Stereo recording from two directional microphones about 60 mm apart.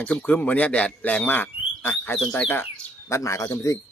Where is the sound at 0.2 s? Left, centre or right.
Left.